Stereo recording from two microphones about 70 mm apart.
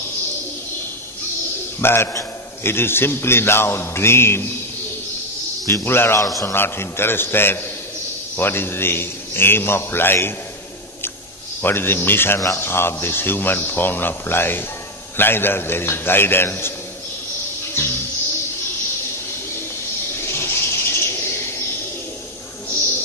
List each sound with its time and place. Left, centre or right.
1.8 s a man's voice: left
5.7 s a man's voice: left
11.6 s a man's voice: left
20.2 s bird: left